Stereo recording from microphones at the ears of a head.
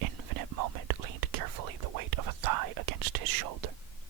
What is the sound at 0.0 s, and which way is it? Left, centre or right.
Whispering, right.